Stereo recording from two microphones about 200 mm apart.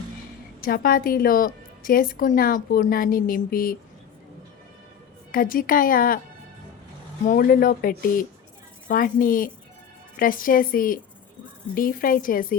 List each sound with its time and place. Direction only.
0.6 s a woman's voice: 45° left (ahead or behind)
5.3 s a woman's voice: 45° left (ahead or behind)
7.3 s a woman's voice: 45° left (ahead or behind)